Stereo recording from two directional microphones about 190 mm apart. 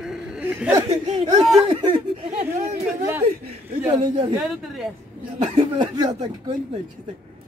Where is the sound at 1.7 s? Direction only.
30° right (ahead or behind).